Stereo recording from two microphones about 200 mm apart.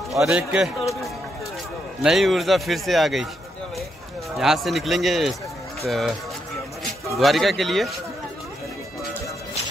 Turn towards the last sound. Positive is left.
turn(degrees=0)  # may be behind; listen again after turning